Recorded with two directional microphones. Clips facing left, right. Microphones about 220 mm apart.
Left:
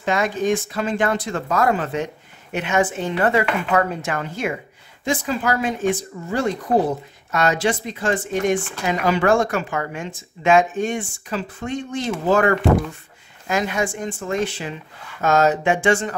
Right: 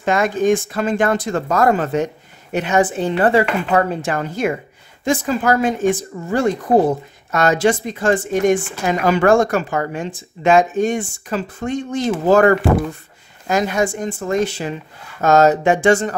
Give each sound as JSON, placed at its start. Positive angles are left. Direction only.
{"t": 0.0, "sound": "speech", "side_deg": -50}